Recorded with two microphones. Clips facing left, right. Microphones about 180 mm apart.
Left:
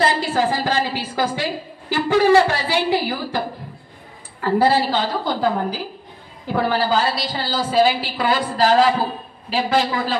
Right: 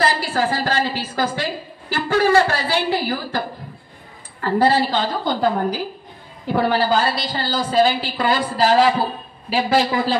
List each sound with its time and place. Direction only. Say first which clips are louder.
0.0 s a woman's voice: left 1 dB; 20° left (ahead or behind); by 9.8 s 5° right (ahead or behind)